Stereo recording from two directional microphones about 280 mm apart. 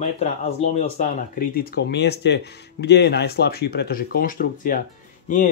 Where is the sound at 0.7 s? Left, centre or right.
Left.